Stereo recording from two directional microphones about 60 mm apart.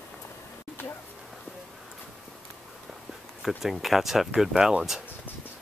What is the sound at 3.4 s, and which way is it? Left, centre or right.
Speech, centre.